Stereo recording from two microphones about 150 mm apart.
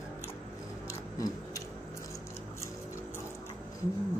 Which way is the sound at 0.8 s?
20° left (ahead or behind).